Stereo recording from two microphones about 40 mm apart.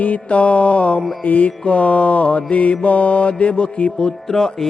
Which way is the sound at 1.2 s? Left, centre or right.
Left.